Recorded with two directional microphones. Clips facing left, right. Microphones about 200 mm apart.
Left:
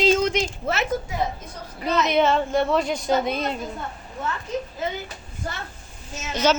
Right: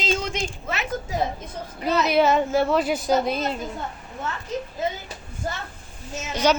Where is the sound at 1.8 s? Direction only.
5° right (ahead or behind).